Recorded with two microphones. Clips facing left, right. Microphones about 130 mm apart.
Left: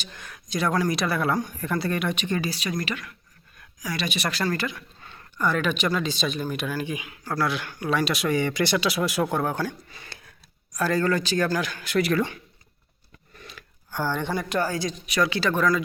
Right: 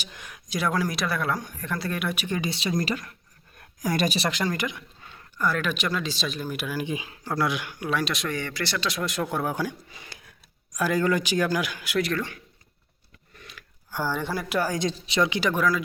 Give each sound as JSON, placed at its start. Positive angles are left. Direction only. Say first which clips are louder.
{"t": 0.0, "sound": "speech", "louder": "left 1 dB", "side_deg": -10}
{"t": 2.4, "sound": "speech", "louder": "right 2 dB", "side_deg": -25}
{"t": 2.8, "sound": "speech", "louder": "right 3 dB", "side_deg": -35}
{"t": 3.6, "sound": "a sound", "louder": "right 5 dB", "side_deg": -50}
{"t": 4.2, "sound": "speech", "louder": "even", "side_deg": -20}
{"t": 5.1, "sound": "speech", "louder": "left 2 dB", "side_deg": 0}
{"t": 6.8, "sound": "speech", "louder": "right 1 dB", "side_deg": -30}
{"t": 7.9, "sound": "speech", "louder": "left 4 dB", "side_deg": 0}
{"t": 11.9, "sound": "speech", "louder": "left 3 dB", "side_deg": 5}
{"t": 13.4, "sound": "a sound", "louder": "left 3 dB", "side_deg": 30}
{"t": 13.9, "sound": "speech", "louder": "left 1 dB", "side_deg": -10}
{"t": 14.8, "sound": "speech", "louder": "right 1 dB", "side_deg": -30}